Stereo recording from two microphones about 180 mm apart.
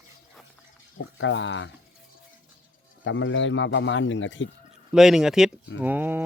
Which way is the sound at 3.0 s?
90° left.